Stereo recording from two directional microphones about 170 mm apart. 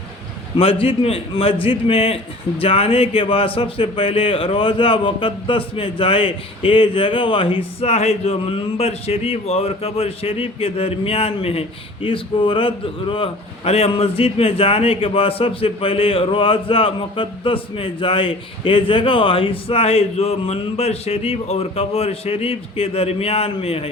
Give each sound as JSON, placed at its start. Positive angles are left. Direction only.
{"t": 0.5, "sound": "a man's voice", "side_deg": 35}